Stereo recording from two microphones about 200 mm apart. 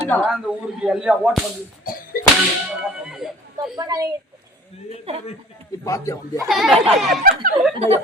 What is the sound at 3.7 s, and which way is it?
Speech, 20° right (ahead or behind).